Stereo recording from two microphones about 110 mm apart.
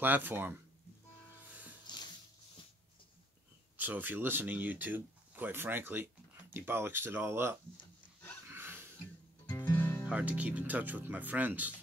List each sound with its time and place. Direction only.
0.0 s speech: 15° right (ahead or behind)
1.9 s a sound: 40° left (ahead or behind)
3.7 s speech: 15° right (ahead or behind)
8.5 s a sound: 20° right (ahead or behind)
9.7 s music: 20° left (ahead or behind)
10.0 s speech: 15° right (ahead or behind)